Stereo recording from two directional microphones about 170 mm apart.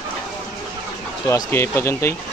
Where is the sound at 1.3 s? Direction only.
15° left (ahead or behind).